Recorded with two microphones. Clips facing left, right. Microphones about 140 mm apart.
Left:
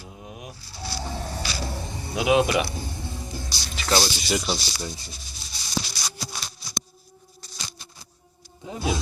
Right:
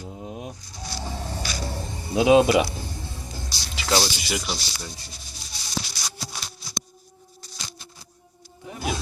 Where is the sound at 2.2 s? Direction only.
25° right (ahead or behind).